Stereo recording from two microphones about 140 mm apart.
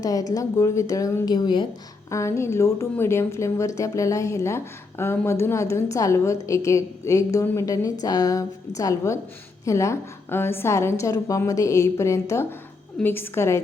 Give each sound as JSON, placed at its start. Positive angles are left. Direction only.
{"t": 0.0, "sound": "a woman's voice", "side_deg": 25}
{"t": 2.0, "sound": "a woman's voice", "side_deg": 20}